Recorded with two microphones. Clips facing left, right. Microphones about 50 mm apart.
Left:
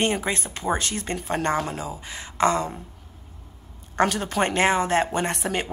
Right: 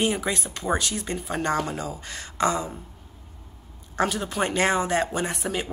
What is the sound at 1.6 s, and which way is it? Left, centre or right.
Speech, centre.